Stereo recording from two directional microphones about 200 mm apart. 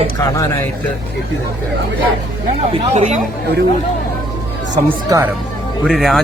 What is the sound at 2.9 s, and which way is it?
Speech, 35° right (ahead or behind).